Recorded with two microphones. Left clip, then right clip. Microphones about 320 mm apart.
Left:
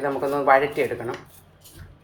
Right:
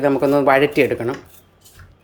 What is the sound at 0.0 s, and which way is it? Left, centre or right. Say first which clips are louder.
Speech: right 7 dB; right.